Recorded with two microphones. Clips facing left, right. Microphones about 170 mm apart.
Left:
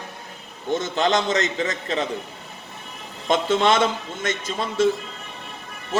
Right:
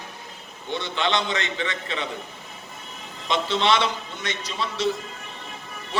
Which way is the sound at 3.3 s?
45° left (ahead or behind).